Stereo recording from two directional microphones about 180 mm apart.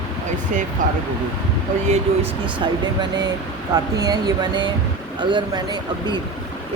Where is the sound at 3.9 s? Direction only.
20° right (ahead or behind).